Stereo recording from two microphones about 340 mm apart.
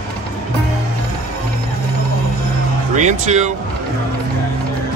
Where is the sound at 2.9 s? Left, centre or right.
Right.